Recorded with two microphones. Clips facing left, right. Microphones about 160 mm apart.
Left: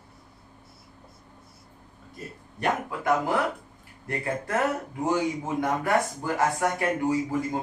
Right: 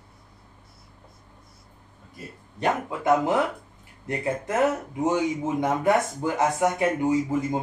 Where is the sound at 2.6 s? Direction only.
20° right (ahead or behind).